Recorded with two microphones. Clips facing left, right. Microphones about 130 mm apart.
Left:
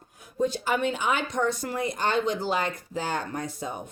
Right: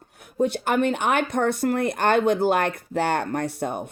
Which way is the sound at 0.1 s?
65° right (ahead or behind).